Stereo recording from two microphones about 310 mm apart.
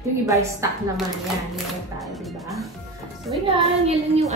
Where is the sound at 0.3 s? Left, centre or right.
Centre.